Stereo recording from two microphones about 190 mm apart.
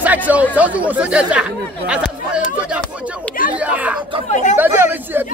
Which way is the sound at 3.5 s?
5° right (ahead or behind).